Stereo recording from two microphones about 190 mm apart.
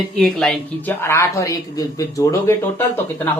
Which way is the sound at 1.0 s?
15° left (ahead or behind).